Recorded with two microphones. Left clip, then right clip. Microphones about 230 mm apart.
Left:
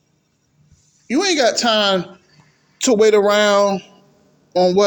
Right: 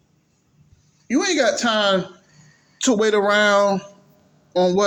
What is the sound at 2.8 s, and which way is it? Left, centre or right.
A woman's voice, left.